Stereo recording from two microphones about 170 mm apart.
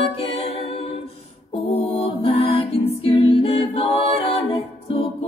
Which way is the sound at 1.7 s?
35° left (ahead or behind).